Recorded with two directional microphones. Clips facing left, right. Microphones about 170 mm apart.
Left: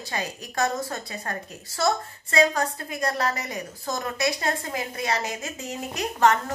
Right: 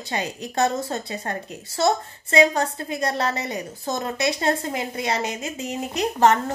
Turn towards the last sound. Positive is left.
turn(degrees=-20)  # may be behind; listen again after turning